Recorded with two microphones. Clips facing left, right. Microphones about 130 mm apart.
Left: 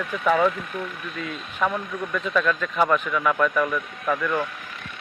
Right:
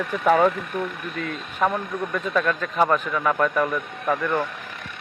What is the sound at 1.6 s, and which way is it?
Speech, 40° right (ahead or behind).